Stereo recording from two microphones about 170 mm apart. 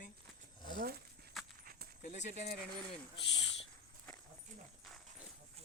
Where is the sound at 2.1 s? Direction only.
40° left (ahead or behind).